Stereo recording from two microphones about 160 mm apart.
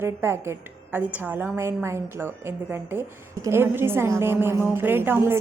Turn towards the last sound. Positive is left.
turn(degrees=-15)  # may be behind; listen again after turning